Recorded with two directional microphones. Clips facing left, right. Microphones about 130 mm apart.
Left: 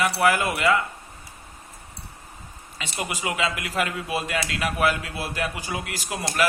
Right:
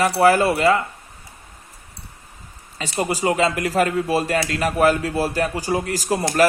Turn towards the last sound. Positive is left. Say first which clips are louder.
# right 9 dB
turn(degrees=-40)  # may be behind; listen again after turning